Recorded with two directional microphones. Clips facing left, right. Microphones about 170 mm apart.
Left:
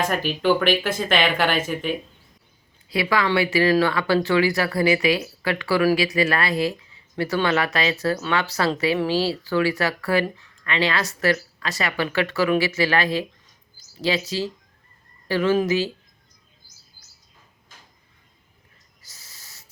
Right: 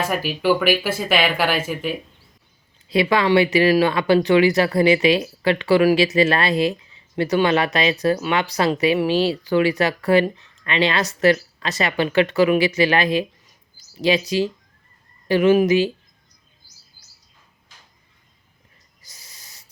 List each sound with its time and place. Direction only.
0.0 s speech: 5° right (ahead or behind)
2.9 s speech: 20° right (ahead or behind)
19.0 s owl: 15° right (ahead or behind)